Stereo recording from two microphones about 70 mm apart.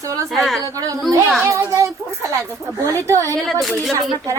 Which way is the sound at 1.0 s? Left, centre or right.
Centre.